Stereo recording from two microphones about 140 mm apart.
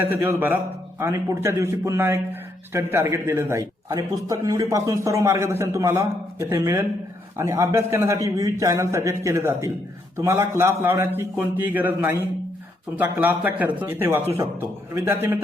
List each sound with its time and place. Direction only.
0.0 s a man's voice: 15° right (ahead or behind)
13.0 s a man's voice: 10° right (ahead or behind)